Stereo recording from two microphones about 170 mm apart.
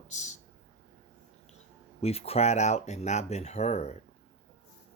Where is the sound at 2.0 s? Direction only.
35° left (ahead or behind).